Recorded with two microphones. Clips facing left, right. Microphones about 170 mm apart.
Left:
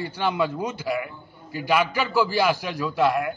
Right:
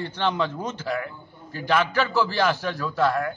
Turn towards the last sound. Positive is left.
turn(degrees=15)  # may be behind; listen again after turning